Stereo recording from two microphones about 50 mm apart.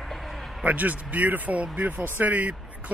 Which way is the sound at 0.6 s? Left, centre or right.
Right.